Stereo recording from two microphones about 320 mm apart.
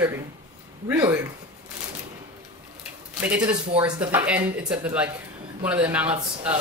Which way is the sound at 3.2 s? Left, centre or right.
Centre.